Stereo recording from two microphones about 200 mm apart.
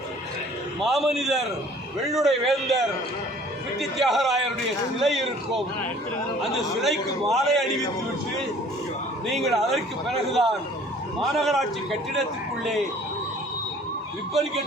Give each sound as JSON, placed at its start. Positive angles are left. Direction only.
{"t": 0.8, "sound": "a man's voice", "side_deg": 0}
{"t": 9.2, "sound": "a man's voice", "side_deg": 0}